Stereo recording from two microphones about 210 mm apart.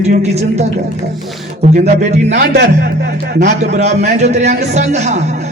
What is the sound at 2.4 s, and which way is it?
Speech, 55° right (ahead or behind).